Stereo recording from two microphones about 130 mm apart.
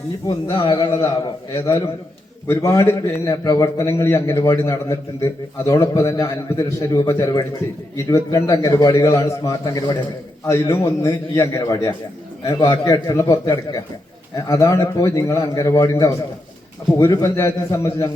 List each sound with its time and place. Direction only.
0.6 s a man's voice: 30° left (ahead or behind)